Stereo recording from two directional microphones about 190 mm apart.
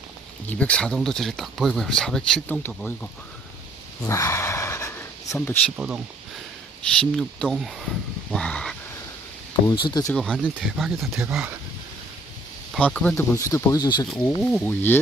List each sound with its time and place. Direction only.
0.4 s speech: 10° left (ahead or behind)
4.0 s a sound: 15° left (ahead or behind)
5.7 s speech: 5° right (ahead or behind)
7.0 s speech: 5° left (ahead or behind)
9.6 s speech: 25° left (ahead or behind)
10.2 s speech: 5° left (ahead or behind)
12.7 s speech: 5° left (ahead or behind); by 14.1 s 20° left (ahead or behind)
14.1 s speech: 10° left (ahead or behind)